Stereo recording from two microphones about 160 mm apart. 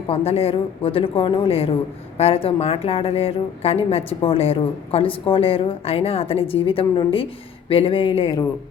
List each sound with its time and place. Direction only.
0.1 s a woman's voice: 40° left (ahead or behind)